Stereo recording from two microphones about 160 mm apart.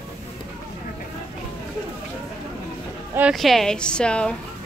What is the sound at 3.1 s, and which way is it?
Speech, 5° right (ahead or behind).